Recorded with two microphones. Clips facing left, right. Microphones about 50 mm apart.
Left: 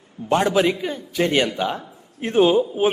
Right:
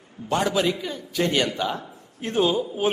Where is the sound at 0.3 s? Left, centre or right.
Left.